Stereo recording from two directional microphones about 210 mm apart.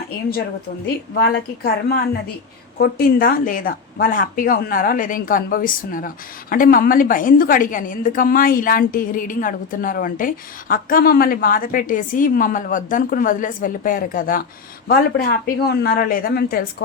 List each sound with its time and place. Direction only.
1.2 s speech: 45° left (ahead or behind)